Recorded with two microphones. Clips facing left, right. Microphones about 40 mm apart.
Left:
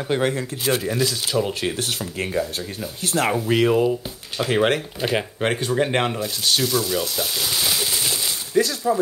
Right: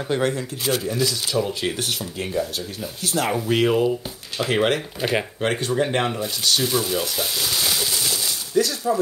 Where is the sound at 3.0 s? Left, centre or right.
Left.